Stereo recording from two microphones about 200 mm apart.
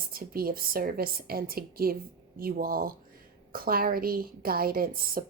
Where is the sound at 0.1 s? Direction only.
45° right (ahead or behind).